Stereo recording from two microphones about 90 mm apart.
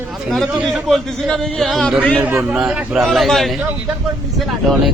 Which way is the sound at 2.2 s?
20° right (ahead or behind).